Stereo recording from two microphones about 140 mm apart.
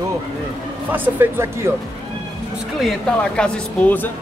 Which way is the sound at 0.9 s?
15° right (ahead or behind).